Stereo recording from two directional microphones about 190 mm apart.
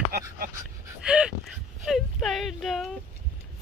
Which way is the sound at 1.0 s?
5° right (ahead or behind).